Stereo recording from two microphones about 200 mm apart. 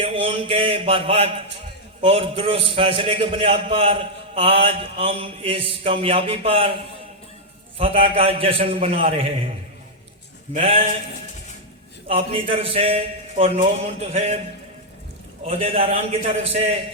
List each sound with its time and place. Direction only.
0.0 s mantra: 25° right (ahead or behind)
7.8 s mantra: 25° right (ahead or behind)
10.5 s mantra: 30° right (ahead or behind)
12.0 s mantra: 25° right (ahead or behind)
15.4 s mantra: 30° right (ahead or behind)